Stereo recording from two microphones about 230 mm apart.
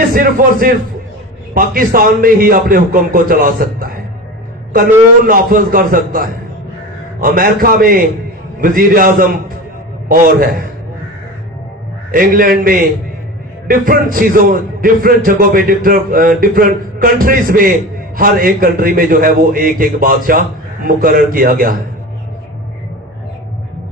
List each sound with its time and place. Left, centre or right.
0.1 s a man's voice: right
5.3 s a man's voice: right
12.1 s a man's voice: right